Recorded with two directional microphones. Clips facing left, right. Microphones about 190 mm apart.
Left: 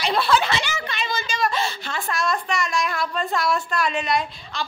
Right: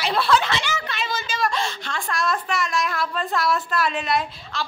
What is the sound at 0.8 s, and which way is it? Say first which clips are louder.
A woman's voice: left 1 dB; centre (ahead or behind).